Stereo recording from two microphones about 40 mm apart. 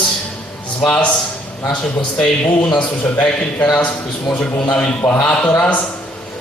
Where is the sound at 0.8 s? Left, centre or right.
Left.